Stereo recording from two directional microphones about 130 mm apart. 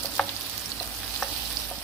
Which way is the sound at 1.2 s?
Centre (ahead or behind).